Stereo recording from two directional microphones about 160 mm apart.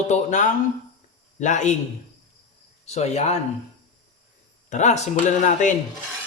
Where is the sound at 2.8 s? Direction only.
45° left (ahead or behind).